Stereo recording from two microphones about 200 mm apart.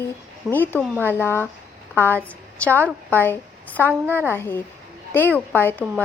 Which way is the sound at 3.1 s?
10° left (ahead or behind).